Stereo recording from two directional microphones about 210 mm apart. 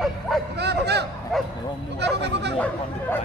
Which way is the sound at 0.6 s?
50° right (ahead or behind).